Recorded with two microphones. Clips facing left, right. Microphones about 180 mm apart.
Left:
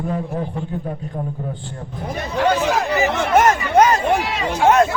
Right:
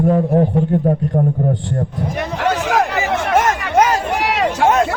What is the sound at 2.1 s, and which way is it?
Hubbub, 75° right (ahead or behind).